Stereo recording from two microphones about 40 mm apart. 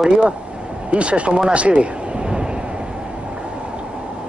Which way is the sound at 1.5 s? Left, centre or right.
Right.